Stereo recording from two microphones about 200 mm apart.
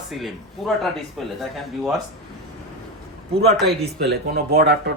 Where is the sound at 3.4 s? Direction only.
55° right (ahead or behind).